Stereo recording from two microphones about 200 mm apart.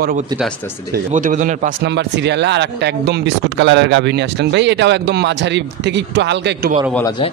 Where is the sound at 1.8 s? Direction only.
60° right (ahead or behind).